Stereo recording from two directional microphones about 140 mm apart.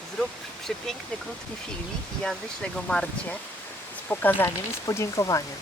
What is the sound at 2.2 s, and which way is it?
Speech, 5° left (ahead or behind).